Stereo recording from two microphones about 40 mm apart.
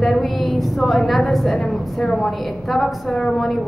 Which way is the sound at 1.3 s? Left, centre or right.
Centre.